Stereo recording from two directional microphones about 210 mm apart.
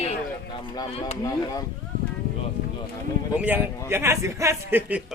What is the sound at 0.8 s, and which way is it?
Speech, 30° left (ahead or behind).